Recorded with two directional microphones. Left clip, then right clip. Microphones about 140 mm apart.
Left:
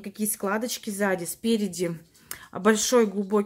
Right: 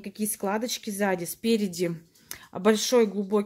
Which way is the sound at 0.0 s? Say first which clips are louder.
Left 1 dB; 15° right (ahead or behind).